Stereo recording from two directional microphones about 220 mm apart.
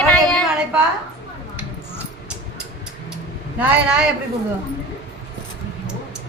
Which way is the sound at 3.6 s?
5° right (ahead or behind).